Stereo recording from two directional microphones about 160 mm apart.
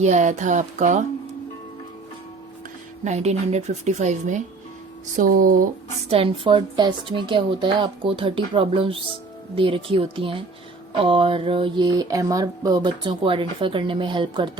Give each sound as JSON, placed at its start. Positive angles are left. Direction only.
{"t": 0.0, "sound": "a woman's voice", "side_deg": -45}
{"t": 3.0, "sound": "a woman's voice", "side_deg": -45}
{"t": 5.1, "sound": "speech", "side_deg": -60}
{"t": 6.1, "sound": "speech", "side_deg": -35}